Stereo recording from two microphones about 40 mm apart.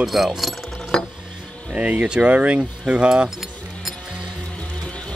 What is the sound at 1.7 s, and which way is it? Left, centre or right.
Speech, right.